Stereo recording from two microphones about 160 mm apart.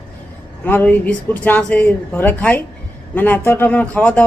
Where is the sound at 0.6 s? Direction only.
10° left (ahead or behind).